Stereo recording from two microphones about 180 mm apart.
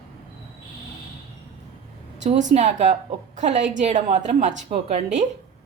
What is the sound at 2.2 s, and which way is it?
A woman's voice, 40° right (ahead or behind).